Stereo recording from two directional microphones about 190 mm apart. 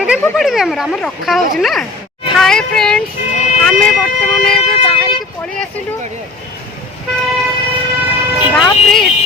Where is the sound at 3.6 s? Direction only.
5° left (ahead or behind).